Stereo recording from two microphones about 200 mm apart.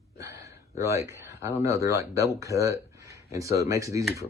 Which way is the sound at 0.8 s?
15° right (ahead or behind).